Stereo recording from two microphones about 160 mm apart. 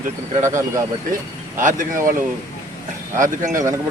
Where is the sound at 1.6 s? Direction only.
55° right (ahead or behind).